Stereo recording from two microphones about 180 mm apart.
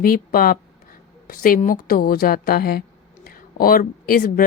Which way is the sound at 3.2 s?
55° left (ahead or behind).